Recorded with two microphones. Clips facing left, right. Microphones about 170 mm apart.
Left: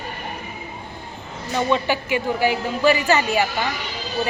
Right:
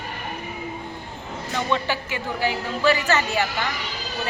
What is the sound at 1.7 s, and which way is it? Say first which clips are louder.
A woman's voice: left 4 dB; 15° left (ahead or behind).